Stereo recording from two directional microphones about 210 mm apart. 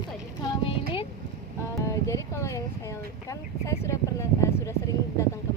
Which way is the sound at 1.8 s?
15° left (ahead or behind).